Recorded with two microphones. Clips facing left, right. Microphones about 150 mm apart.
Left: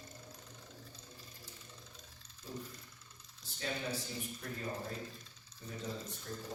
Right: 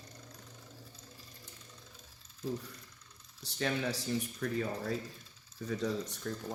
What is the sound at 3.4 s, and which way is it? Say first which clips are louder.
Speech: right 6 dB; 80° right.